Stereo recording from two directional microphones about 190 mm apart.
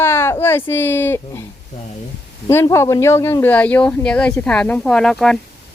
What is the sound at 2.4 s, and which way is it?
Speech, 15° left (ahead or behind).